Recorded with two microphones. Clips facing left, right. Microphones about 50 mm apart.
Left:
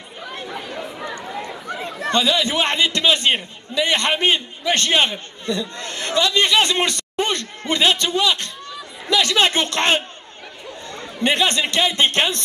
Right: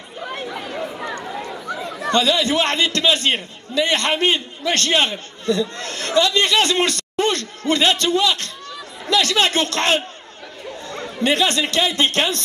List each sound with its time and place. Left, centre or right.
0.6 s chatter: centre
2.1 s a man's voice: centre
11.1 s speech: left